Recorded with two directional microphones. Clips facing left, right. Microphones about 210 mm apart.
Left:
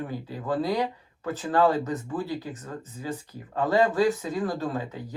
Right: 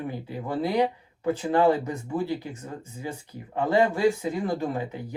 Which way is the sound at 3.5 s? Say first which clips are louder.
Left 1 dB; 25° right (ahead or behind).